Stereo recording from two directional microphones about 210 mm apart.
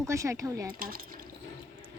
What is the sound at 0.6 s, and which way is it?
Speech, 45° right (ahead or behind).